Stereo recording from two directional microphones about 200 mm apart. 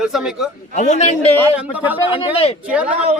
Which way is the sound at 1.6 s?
5° right (ahead or behind).